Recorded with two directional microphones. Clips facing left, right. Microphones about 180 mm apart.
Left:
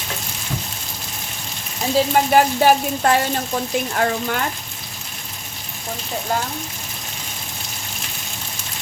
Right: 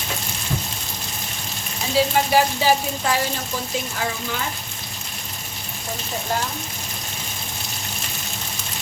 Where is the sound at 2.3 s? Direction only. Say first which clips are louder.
Left 5 dB; 60° left (ahead or behind).